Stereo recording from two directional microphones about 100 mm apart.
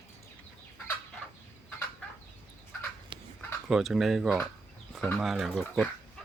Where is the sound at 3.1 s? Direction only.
55° right (ahead or behind).